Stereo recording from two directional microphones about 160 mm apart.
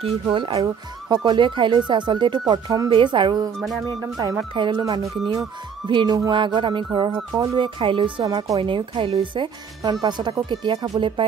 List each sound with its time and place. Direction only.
0.3 s speech: 30° right (ahead or behind)
3.5 s music: centre (ahead or behind)
4.6 s speech: 30° right (ahead or behind)